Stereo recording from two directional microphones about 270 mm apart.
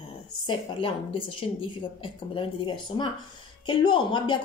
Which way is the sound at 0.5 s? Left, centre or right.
Centre.